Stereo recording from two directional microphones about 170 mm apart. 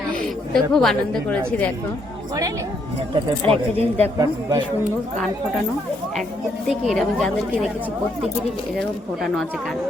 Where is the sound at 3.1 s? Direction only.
35° right (ahead or behind).